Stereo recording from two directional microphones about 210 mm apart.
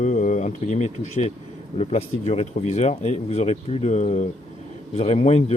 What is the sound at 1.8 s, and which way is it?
Speech, 30° left (ahead or behind).